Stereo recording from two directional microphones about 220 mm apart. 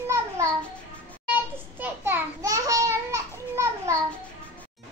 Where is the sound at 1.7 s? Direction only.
10° right (ahead or behind).